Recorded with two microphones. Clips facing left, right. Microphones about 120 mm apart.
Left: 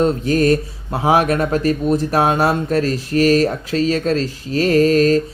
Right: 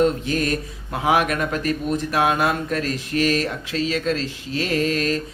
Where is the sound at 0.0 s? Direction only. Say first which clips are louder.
Left 5 dB; 40° left (ahead or behind).